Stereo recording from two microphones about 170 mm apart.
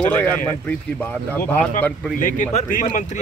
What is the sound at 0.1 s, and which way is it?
Speech, 10° left (ahead or behind).